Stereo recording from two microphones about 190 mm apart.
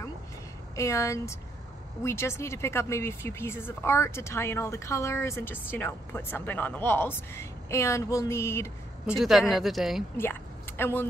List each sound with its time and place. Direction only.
0.7 s speech: 15° left (ahead or behind)
9.0 s speech: centre (ahead or behind)
10.8 s speech: 10° left (ahead or behind)